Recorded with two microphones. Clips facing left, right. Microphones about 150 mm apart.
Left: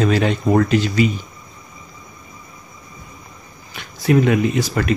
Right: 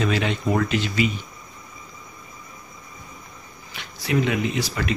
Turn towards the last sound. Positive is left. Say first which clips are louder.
# left 6 dB
turn(degrees=50)  # may be behind; listen again after turning